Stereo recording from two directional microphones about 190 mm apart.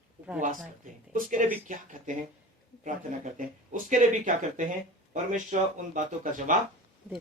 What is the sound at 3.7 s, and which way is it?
Speech, 45° right (ahead or behind).